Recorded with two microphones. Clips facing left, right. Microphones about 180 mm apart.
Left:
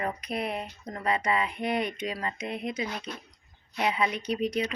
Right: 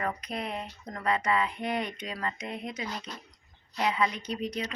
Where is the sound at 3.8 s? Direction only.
10° left (ahead or behind).